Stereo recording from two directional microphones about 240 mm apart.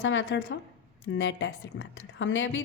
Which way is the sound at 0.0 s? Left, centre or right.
Left.